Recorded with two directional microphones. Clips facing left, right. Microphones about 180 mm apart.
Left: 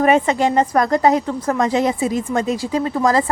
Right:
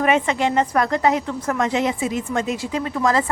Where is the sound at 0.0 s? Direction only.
40° left (ahead or behind).